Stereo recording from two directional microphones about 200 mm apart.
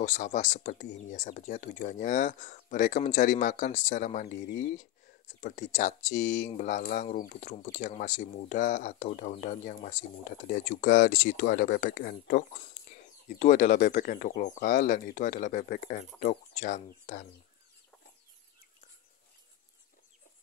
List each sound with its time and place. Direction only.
0.0 s speech: 35° left (ahead or behind)